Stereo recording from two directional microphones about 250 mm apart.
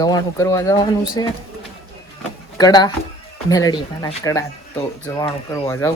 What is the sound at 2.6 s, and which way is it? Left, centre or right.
Speech, centre.